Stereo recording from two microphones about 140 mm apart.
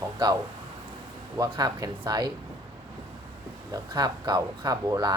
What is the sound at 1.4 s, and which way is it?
Speech, 25° right (ahead or behind).